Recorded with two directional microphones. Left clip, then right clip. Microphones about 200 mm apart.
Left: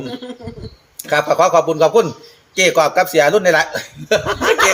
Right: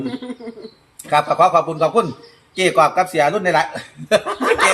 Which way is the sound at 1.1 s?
55° left (ahead or behind).